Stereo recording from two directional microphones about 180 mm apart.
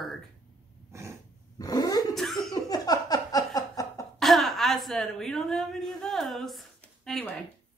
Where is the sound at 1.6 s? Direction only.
20° left (ahead or behind).